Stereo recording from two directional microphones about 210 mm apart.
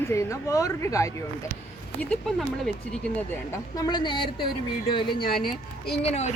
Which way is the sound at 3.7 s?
20° left (ahead or behind).